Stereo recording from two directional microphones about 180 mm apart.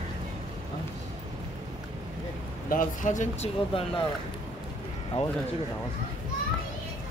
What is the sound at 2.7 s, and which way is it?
Speech, 45° left (ahead or behind).